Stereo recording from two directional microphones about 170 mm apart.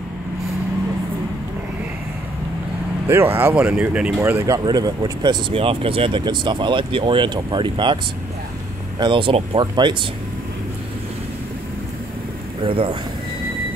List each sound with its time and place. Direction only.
3.1 s speech: 15° right (ahead or behind); by 8.0 s 30° right (ahead or behind)
9.0 s speech: 30° right (ahead or behind)
12.6 s speech: 30° right (ahead or behind)